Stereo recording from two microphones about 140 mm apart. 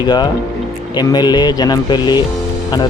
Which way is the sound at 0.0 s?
30° left (ahead or behind).